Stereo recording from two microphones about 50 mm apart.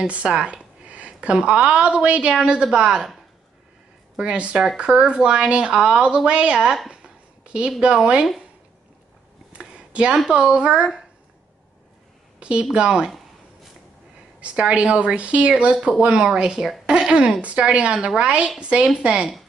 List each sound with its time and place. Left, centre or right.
0.0 s a woman's voice: right
4.2 s a woman's voice: right
6.9 s a sound: right
7.8 s a woman's voice: right
9.8 s a sound: right
10.1 s speech: centre
12.4 s a woman's voice: right
14.4 s a woman's voice: right